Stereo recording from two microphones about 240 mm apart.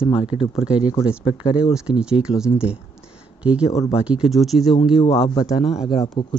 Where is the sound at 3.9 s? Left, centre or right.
Centre.